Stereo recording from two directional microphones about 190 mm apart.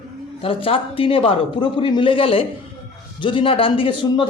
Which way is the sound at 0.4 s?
30° left (ahead or behind).